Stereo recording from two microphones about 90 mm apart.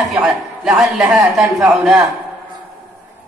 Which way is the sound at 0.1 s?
5° right (ahead or behind).